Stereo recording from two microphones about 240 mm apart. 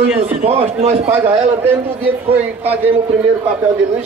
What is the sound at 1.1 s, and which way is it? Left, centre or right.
Speech, centre.